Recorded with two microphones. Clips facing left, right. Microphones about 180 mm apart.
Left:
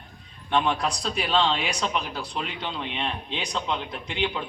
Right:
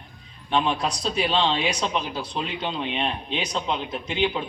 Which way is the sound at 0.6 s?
20° right (ahead or behind).